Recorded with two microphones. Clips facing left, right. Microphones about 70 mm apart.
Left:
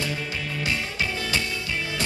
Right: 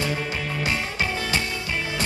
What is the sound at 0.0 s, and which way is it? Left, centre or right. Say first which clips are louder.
Music: right 3 dB; right.